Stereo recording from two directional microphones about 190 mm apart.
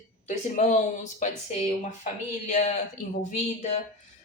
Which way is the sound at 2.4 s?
35° left (ahead or behind).